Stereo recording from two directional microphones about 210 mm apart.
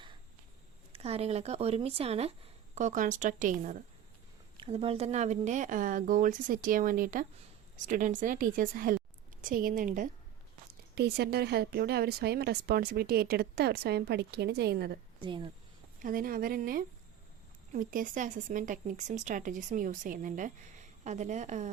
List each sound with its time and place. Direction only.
0.9 s speech: 30° right (ahead or behind)
4.5 s speech: 25° right (ahead or behind)
10.9 s speech: 50° right (ahead or behind)
15.2 s speech: 25° right (ahead or behind)
16.0 s speech: 40° right (ahead or behind)